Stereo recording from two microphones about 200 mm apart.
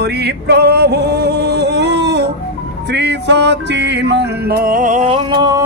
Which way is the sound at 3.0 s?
60° right (ahead or behind).